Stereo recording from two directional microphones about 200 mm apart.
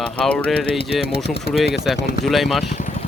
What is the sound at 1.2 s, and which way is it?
Speech, 55° left (ahead or behind).